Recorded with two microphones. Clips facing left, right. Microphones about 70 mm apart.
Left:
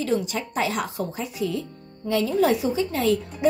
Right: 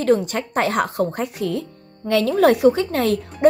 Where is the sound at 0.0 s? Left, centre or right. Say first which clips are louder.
Right 6 dB; right.